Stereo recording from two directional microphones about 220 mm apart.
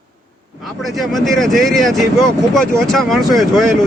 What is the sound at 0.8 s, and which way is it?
Speech, centre (ahead or behind).